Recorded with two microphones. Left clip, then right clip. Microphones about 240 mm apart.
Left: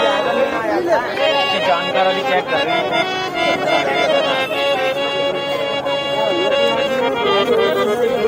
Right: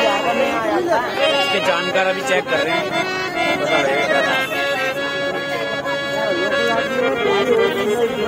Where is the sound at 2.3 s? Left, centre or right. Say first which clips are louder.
Left 1 dB; centre.